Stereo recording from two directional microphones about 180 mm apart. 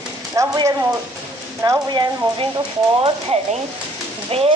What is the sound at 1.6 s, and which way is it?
Speech, 20° right (ahead or behind).